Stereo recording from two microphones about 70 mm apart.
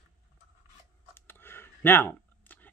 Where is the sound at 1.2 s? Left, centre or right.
Left.